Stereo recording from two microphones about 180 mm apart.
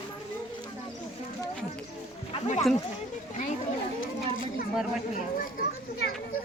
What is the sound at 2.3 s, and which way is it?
Speech, 40° left (ahead or behind).